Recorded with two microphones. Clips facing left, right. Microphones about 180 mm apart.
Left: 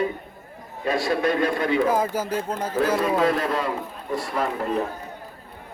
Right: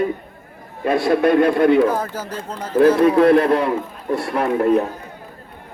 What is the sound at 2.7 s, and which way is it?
A man's voice, 60° right (ahead or behind).